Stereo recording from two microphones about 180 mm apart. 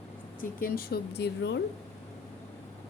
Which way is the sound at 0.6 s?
60° left (ahead or behind).